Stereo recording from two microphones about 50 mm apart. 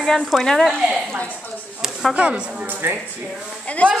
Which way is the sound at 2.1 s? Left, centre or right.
Right.